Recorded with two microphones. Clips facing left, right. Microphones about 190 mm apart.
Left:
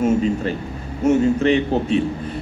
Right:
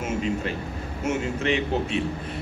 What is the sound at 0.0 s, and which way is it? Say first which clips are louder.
A man's voice: left 8 dB; 35° left (ahead or behind).